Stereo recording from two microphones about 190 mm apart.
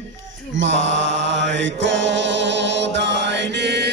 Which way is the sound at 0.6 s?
75° right (ahead or behind).